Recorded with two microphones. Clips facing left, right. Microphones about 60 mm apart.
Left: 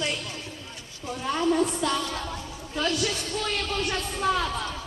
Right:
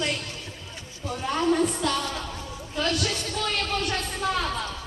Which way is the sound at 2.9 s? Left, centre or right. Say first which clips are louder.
Even; right.